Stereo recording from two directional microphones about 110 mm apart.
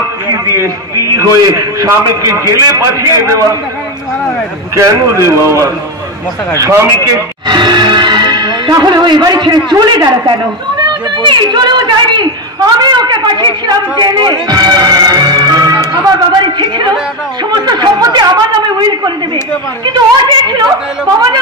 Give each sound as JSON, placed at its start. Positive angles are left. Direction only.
{"t": 0.3, "sound": "a man's voice", "side_deg": -30}
{"t": 4.7, "sound": "a man's voice", "side_deg": -30}
{"t": 7.1, "sound": "music", "side_deg": -35}
{"t": 10.9, "sound": "a woman's voice", "side_deg": -40}